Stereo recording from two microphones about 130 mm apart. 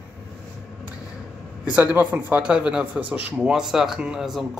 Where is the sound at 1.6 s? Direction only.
10° right (ahead or behind).